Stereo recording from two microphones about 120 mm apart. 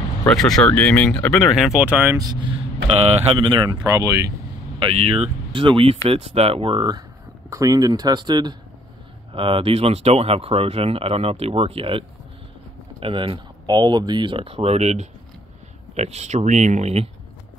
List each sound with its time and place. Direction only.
0.3 s speech: 5° left (ahead or behind)
1.5 s speech: 5° right (ahead or behind)
2.1 s speech: 35° right (ahead or behind)
4.7 s speech: 50° right (ahead or behind); by 8.5 s 35° right (ahead or behind)
9.3 s speech: 50° right (ahead or behind)
13.0 s speech: 50° right (ahead or behind)